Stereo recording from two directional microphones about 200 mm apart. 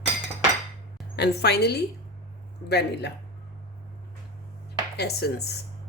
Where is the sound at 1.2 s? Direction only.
55° left (ahead or behind).